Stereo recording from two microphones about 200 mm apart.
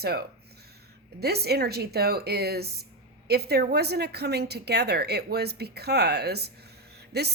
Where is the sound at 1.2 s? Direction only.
55° right (ahead or behind).